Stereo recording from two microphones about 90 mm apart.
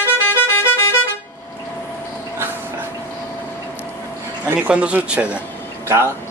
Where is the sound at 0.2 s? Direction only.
25° left (ahead or behind).